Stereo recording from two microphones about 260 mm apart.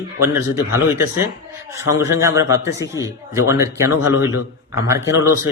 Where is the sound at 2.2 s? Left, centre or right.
Centre.